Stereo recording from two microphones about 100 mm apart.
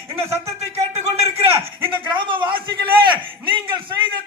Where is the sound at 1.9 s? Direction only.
55° right (ahead or behind).